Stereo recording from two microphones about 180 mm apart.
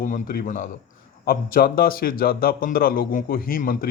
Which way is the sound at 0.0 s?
50° left (ahead or behind).